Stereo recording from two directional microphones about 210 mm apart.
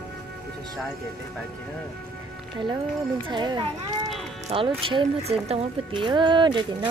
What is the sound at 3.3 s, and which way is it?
Speech, 20° right (ahead or behind).